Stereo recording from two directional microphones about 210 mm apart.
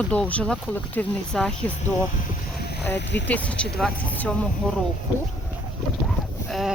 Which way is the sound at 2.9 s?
55° left (ahead or behind).